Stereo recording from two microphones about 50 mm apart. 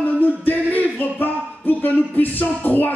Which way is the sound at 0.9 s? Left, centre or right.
Left.